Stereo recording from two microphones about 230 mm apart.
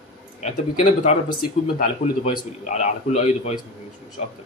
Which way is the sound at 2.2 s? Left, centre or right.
Left.